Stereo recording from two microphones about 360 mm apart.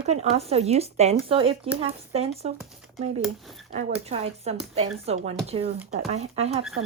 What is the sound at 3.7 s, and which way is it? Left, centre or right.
Speech, centre.